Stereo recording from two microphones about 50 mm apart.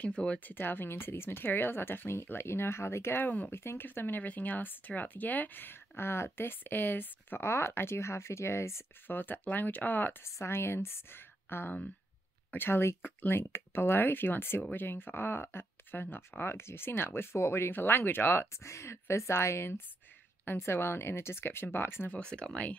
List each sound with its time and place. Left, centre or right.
0.0 s speech: left
0.5 s speech: left
3.2 s speech: left
3.5 s speech: left
7.4 s speech: left
9.0 s speech: left
10.2 s speech: left
16.2 s speech: left
18.6 s speech: left
22.1 s speech: centre